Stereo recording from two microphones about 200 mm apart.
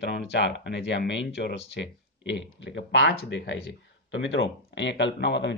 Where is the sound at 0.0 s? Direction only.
60° left (ahead or behind).